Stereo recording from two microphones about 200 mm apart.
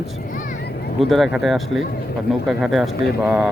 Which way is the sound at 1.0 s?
Centre (ahead or behind).